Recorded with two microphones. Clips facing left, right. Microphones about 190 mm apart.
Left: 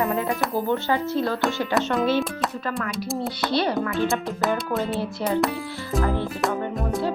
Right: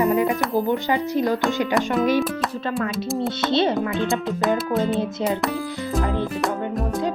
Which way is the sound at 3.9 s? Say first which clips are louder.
Right 1 dB; centre (ahead or behind).